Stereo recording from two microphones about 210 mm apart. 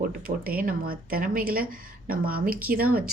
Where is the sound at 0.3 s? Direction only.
45° right (ahead or behind).